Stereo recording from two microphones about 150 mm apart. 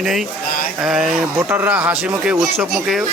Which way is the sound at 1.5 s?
10° right (ahead or behind).